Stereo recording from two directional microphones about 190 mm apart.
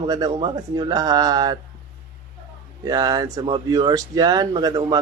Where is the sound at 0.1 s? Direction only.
25° right (ahead or behind).